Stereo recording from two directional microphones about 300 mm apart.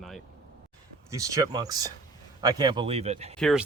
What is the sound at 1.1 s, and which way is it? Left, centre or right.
Speech, centre.